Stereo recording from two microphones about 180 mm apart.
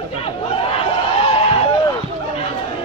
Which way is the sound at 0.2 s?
30° left (ahead or behind).